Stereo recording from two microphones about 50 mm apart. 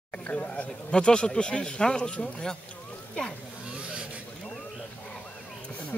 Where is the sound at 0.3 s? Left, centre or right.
Left.